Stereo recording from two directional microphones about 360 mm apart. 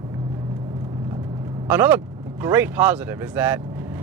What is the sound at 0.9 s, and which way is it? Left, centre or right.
Vehicle, centre.